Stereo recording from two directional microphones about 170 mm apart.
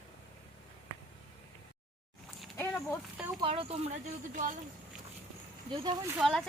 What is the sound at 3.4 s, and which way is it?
Speech, 35° right (ahead or behind).